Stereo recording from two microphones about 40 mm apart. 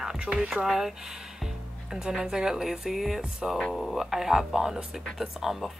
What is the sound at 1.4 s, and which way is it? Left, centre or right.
Speech, centre.